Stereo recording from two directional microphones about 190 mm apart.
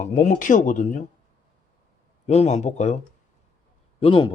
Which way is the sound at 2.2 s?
35° left (ahead or behind).